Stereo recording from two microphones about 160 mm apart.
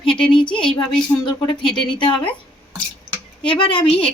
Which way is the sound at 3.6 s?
30° left (ahead or behind).